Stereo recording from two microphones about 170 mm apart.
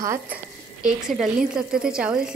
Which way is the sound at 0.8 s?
Centre (ahead or behind).